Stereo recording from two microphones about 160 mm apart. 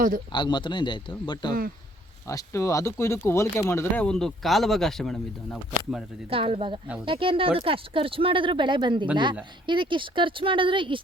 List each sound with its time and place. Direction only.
0.3 s speech: 30° left (ahead or behind)
2.2 s speech: 20° left (ahead or behind); by 6.1 s 5° left (ahead or behind)
6.3 s speech: 35° right (ahead or behind)